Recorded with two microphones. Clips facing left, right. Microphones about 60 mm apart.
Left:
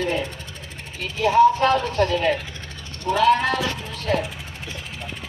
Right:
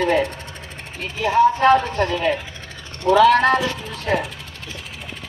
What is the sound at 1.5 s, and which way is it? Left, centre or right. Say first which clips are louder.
Speech: right 4 dB; right.